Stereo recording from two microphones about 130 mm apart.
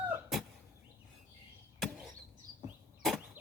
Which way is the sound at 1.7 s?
Centre (ahead or behind).